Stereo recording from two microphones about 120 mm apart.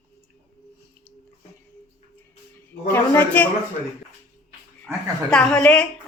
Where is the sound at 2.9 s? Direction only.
15° left (ahead or behind).